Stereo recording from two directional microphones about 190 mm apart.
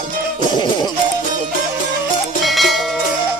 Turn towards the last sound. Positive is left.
turn(degrees=0)  # may be behind; listen again after turning